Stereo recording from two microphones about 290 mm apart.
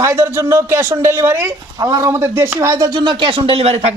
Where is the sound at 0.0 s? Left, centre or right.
Centre.